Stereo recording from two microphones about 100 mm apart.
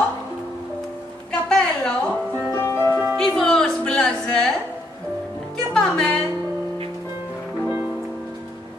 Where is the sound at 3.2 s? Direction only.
5° left (ahead or behind).